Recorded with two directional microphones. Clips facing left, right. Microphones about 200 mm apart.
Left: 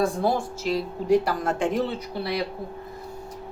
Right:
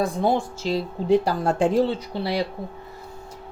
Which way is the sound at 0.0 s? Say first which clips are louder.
Right 1 dB; 25° right (ahead or behind).